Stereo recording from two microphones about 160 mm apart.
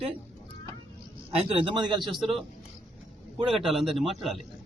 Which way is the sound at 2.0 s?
Centre (ahead or behind).